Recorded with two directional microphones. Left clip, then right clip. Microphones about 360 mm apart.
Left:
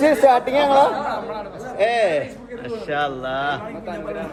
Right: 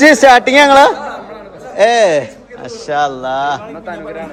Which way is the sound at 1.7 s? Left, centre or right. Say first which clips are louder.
Right 9 dB; right.